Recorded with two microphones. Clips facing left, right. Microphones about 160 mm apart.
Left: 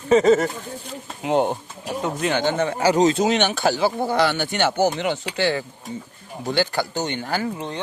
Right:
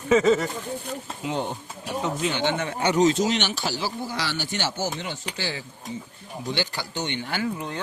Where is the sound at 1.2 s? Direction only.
60° left (ahead or behind).